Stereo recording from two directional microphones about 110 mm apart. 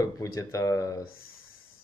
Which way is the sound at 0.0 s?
30° left (ahead or behind).